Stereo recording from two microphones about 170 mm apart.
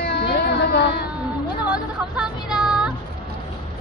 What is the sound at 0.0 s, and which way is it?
Music, 75° left (ahead or behind).